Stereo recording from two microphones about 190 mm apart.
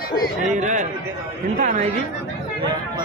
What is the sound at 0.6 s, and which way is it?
Speech, 40° right (ahead or behind).